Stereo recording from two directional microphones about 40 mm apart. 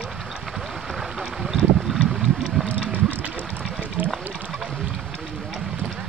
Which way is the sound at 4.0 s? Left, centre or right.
Right.